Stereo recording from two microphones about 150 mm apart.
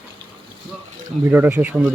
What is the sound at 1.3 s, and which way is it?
Speech, 10° right (ahead or behind).